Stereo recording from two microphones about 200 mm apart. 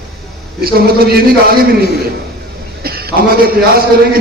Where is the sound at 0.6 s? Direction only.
50° right (ahead or behind).